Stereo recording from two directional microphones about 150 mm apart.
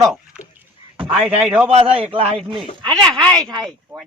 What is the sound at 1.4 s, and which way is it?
Speech, 10° right (ahead or behind).